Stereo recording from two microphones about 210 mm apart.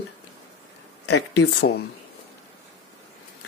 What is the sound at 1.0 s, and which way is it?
Speech, 55° left (ahead or behind).